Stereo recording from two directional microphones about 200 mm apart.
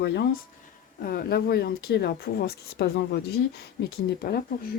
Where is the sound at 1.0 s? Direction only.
50° left (ahead or behind).